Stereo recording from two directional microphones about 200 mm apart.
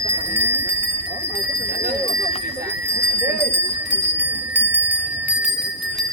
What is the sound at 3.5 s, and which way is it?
Bell, 10° right (ahead or behind).